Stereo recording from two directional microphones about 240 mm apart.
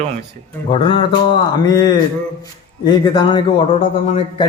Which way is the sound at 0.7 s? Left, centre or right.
Left.